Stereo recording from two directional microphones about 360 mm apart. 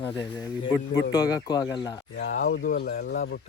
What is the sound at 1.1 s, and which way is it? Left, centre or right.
Speech, centre.